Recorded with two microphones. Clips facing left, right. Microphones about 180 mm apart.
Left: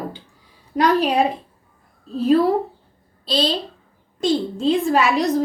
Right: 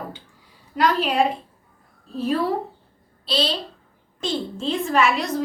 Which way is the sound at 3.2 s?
35° left (ahead or behind).